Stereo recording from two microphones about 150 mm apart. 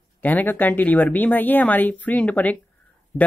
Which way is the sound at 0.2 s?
10° left (ahead or behind).